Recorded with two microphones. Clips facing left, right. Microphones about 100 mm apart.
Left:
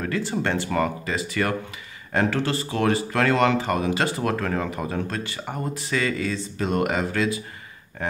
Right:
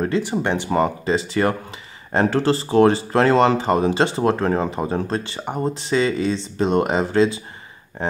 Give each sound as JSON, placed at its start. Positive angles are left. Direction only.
{"t": 0.0, "sound": "speech", "side_deg": -20}